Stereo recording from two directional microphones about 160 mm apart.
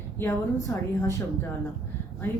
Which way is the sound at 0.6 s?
20° left (ahead or behind).